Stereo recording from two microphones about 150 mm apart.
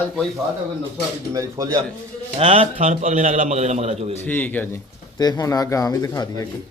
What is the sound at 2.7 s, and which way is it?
A man's voice, 55° right (ahead or behind).